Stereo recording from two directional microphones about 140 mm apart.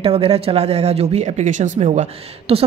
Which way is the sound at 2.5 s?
45° right (ahead or behind).